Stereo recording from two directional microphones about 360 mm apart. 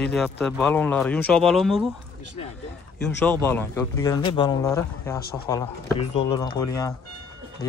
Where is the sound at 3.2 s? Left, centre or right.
Centre.